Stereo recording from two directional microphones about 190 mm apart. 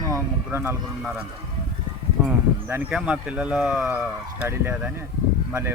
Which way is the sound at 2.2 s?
10° right (ahead or behind).